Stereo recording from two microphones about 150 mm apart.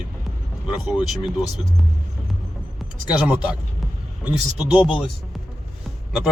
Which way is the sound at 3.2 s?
10° right (ahead or behind).